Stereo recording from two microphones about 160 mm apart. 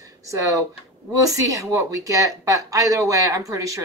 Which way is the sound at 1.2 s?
20° right (ahead or behind).